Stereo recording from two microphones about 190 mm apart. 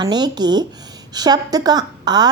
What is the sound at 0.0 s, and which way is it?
A woman's voice, 20° right (ahead or behind).